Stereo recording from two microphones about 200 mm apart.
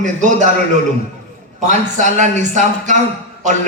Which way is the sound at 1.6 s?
35° right (ahead or behind).